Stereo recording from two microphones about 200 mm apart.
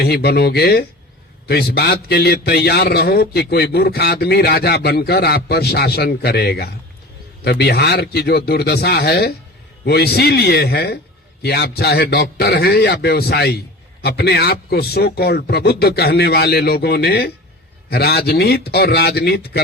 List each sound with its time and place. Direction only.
0.0 s a man's voice: 55° left (ahead or behind)